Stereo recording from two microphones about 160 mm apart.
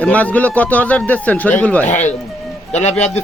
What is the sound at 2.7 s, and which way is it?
Speech, 45° left (ahead or behind).